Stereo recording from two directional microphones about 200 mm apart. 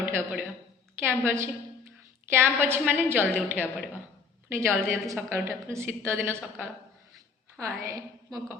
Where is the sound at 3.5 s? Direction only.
10° left (ahead or behind).